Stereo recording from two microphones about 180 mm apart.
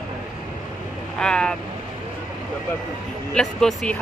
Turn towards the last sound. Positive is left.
turn(degrees=5)  # may be behind; listen again after turning